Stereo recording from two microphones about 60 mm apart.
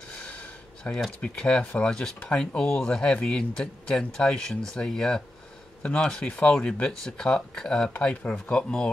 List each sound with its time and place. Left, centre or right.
0.8 s speech: left
1.3 s speech: centre
7.9 s speech: centre